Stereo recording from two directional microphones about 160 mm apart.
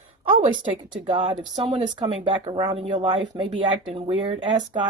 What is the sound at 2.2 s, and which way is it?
Speech, 30° right (ahead or behind).